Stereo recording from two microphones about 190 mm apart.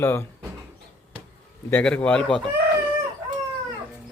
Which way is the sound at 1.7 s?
5° left (ahead or behind).